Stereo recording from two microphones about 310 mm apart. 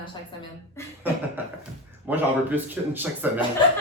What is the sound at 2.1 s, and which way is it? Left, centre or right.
Speech, centre.